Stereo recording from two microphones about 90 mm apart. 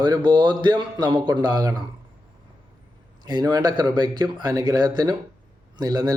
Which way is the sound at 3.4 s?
45° right (ahead or behind).